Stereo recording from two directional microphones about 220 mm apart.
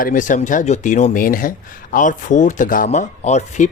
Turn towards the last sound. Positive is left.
turn(degrees=30)  # may be behind; listen again after turning